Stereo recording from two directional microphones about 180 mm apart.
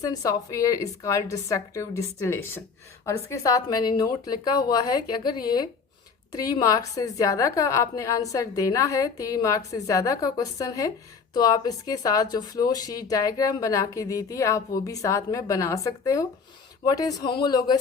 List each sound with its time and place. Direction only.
0.0 s a woman's voice: 20° left (ahead or behind)